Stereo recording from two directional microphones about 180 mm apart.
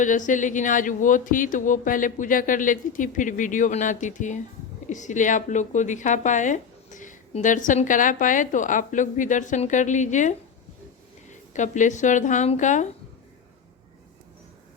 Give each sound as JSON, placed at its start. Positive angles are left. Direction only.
{"t": 0.0, "sound": "speech", "side_deg": 45}